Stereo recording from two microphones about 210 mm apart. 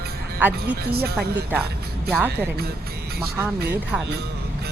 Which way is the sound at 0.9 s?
50° right (ahead or behind).